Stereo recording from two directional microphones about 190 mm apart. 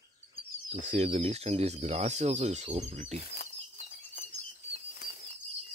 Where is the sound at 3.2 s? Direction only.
55° left (ahead or behind).